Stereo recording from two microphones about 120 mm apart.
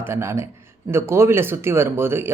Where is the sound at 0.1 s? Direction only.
25° right (ahead or behind).